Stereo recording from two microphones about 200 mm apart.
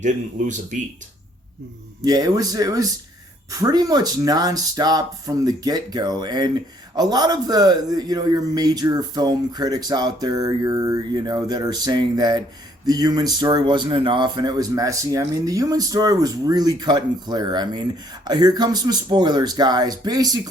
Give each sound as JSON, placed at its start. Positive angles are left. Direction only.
{"t": 0.0, "sound": "speech", "side_deg": -40}
{"t": 2.0, "sound": "speech", "side_deg": -20}